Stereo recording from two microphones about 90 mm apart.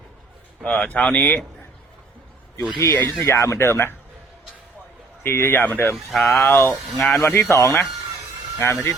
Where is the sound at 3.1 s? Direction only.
35° left (ahead or behind).